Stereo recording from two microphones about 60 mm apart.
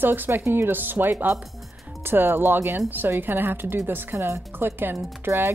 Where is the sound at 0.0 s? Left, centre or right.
Right.